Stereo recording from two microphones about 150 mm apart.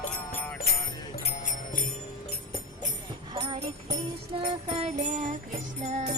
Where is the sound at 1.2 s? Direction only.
60° left (ahead or behind).